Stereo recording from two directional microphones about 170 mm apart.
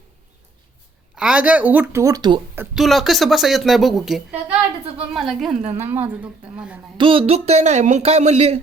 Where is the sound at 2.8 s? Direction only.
Centre (ahead or behind).